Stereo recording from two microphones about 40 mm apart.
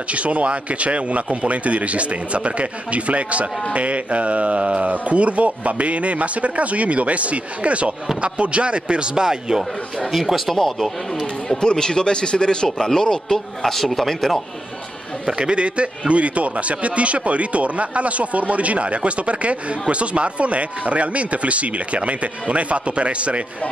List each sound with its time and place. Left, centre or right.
0.1 s a man's voice: right; by 9.6 s centre
9.6 s a man's voice: centre
11.5 s a man's voice: centre
15.3 s a man's voice: right